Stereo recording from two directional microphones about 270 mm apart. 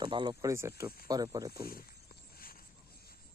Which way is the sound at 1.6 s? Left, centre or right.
Left.